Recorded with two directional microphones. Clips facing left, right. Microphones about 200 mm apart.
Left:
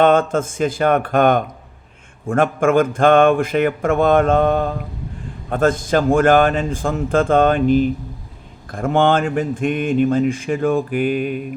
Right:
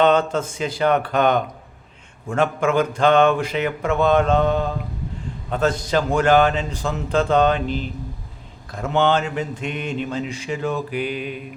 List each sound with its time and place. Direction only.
0.0 s speech: 50° left (ahead or behind)